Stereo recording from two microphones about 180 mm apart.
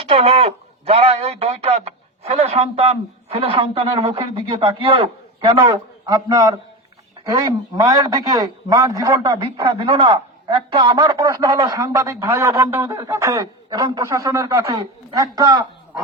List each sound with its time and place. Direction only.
0.1 s a man's voice: 35° right (ahead or behind)